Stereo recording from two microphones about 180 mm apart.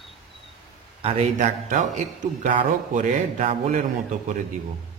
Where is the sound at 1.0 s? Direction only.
35° right (ahead or behind).